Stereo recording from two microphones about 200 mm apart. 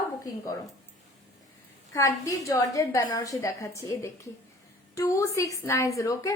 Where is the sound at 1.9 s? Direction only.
15° left (ahead or behind).